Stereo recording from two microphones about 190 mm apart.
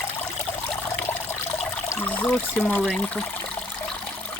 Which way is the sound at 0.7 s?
10° left (ahead or behind).